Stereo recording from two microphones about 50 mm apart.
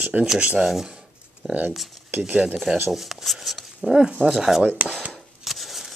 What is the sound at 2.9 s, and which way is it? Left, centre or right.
Speech, centre.